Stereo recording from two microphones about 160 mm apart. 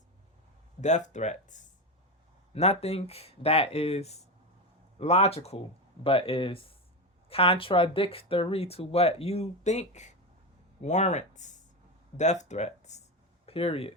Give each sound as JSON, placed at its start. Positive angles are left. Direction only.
{"t": 0.8, "sound": "speech", "side_deg": 50}